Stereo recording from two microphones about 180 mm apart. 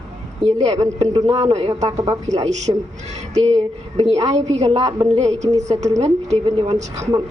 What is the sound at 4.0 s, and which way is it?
A woman's voice, 35° right (ahead or behind).